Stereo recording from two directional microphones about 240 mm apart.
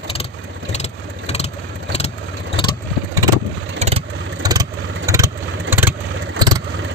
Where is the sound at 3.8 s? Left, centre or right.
Right.